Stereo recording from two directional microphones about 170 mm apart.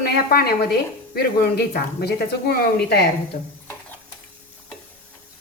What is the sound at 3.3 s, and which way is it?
Speech, 50° left (ahead or behind).